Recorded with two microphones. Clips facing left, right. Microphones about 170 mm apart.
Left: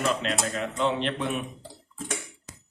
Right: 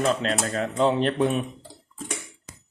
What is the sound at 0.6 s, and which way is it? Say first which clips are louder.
Speech: right 7 dB; 35° right (ahead or behind).